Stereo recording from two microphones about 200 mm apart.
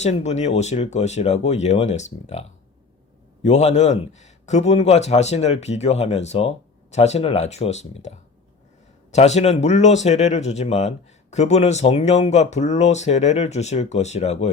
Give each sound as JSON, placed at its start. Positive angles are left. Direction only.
{"t": 0.0, "sound": "speech", "side_deg": 35}